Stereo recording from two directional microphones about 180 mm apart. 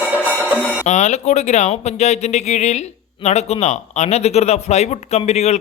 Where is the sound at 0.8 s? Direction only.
40° left (ahead or behind).